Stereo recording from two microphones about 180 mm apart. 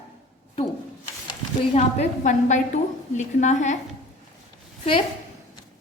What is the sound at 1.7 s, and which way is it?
A woman's voice, 40° left (ahead or behind).